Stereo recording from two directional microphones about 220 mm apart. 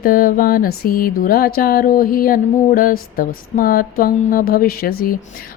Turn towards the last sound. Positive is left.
turn(degrees=45)  # may be behind; listen again after turning